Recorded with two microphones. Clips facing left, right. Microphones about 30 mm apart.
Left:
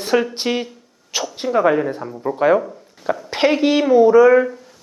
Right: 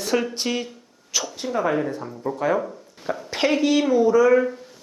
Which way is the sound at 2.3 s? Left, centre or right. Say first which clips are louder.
Left 7 dB; left.